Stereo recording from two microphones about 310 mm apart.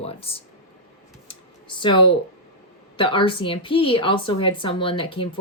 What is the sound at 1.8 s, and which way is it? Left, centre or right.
A woman's voice, centre.